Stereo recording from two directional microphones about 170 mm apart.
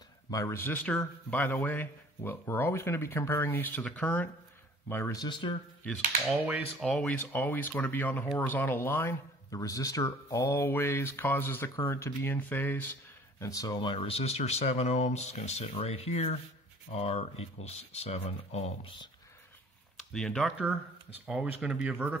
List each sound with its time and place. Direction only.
0.3 s speech: 15° left (ahead or behind)
5.2 s speech: 30° left (ahead or behind)
6.4 s speech: centre (ahead or behind); by 18.9 s 35° left (ahead or behind)
20.0 s speech: 5° left (ahead or behind)
21.3 s speech: 5° right (ahead or behind)